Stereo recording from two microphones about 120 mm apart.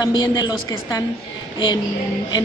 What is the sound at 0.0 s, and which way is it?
A woman's voice, 35° left (ahead or behind).